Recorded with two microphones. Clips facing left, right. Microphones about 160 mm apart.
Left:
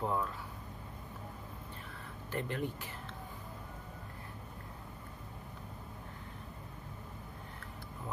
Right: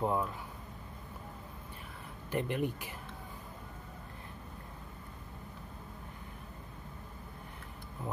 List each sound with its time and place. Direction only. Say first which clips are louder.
0.0 s speech: right 3 dB; 20° right (ahead or behind)
2.3 s speech: right 4 dB; 15° right (ahead or behind)